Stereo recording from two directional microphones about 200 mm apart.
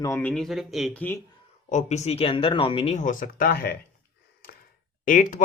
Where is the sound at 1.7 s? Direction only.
35° left (ahead or behind).